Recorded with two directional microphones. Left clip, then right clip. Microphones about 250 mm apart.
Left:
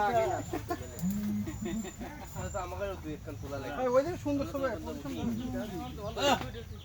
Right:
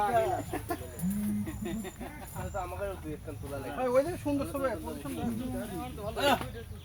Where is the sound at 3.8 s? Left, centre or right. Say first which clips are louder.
Even; centre.